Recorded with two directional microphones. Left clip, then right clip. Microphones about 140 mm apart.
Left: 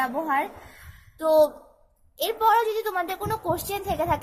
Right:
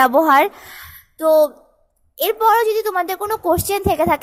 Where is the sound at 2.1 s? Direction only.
40° right (ahead or behind).